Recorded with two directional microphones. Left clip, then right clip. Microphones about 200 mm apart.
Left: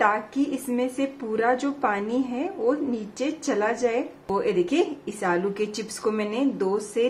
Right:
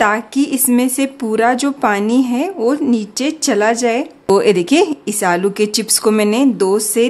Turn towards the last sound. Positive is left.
turn(degrees=-45)  # may be behind; listen again after turning